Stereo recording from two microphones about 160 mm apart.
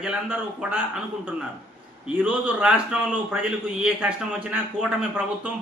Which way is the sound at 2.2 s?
10° right (ahead or behind).